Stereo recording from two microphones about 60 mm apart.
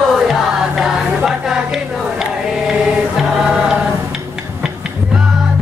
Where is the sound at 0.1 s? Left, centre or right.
Centre.